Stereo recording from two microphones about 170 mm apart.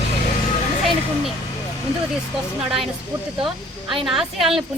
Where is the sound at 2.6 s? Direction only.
Centre (ahead or behind).